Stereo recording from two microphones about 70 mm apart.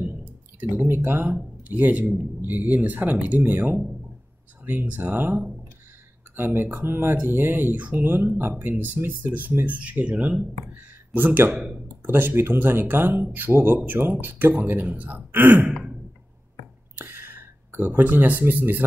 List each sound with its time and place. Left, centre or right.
0.0 s a sound: right
0.8 s speech: right
10.7 s a sound: right
11.5 s speech: centre
12.0 s speech: right
15.7 s sigh: centre
17.0 s speech: right